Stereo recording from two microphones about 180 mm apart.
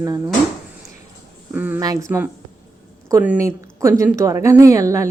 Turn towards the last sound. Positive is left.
turn(degrees=-15)  # may be behind; listen again after turning